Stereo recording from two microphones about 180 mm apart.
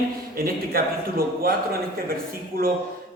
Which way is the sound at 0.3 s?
55° right (ahead or behind).